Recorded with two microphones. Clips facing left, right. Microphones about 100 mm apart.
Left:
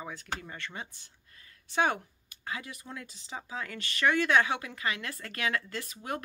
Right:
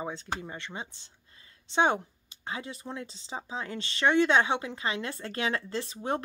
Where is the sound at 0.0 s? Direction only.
25° right (ahead or behind).